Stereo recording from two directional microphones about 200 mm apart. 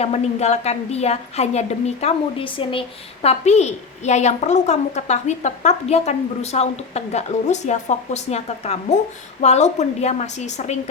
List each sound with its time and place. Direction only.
0.0 s a woman's voice: 30° left (ahead or behind)